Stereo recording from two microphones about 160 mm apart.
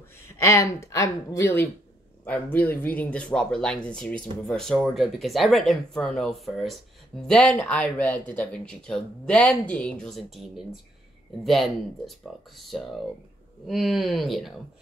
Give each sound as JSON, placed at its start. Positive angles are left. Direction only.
{"t": 0.4, "sound": "speech", "side_deg": 20}